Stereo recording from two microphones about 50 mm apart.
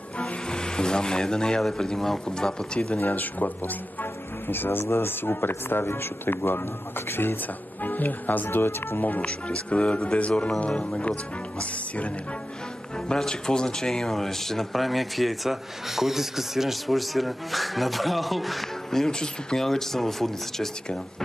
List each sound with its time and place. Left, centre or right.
0.2 s music: centre
1.6 s speech: centre
3.0 s speech: left
7.8 s speech: left
8.5 s speech: left
9.2 s speech: left
13.1 s speech: centre